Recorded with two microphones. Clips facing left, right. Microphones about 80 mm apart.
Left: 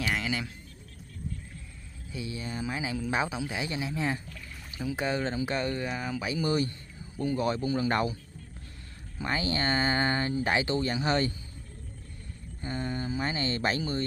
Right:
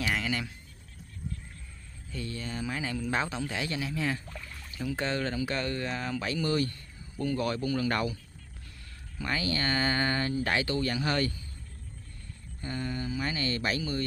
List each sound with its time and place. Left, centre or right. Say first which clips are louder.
0.0 s a sound: even; centre
2.1 s speech: left 1 dB; centre
9.2 s speech: left 1 dB; left
12.6 s speech: left 1 dB; left